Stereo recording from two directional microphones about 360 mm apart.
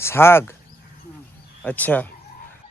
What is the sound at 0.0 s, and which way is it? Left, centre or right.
Speech, centre.